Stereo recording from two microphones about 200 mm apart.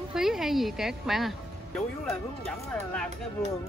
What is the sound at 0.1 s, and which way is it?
Speech, centre (ahead or behind).